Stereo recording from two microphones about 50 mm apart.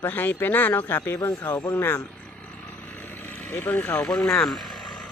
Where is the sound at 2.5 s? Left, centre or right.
Left.